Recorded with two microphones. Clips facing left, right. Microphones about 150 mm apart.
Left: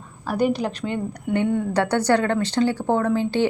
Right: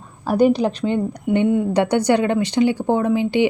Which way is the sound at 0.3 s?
30° right (ahead or behind).